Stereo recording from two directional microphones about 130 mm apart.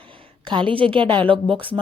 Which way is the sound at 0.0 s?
40° right (ahead or behind).